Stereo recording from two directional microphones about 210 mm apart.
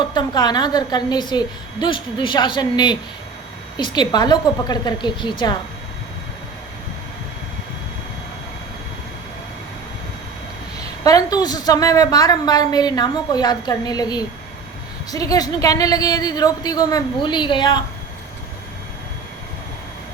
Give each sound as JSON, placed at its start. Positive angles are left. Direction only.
{"t": 0.0, "sound": "a woman's voice", "side_deg": 20}
{"t": 11.0, "sound": "a woman's voice", "side_deg": 15}